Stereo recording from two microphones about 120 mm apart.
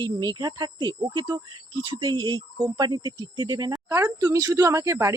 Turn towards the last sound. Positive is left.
turn(degrees=-25)  # may be behind; listen again after turning